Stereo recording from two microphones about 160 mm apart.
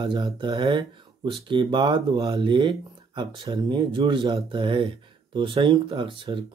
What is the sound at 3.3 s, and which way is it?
Speech, 25° right (ahead or behind).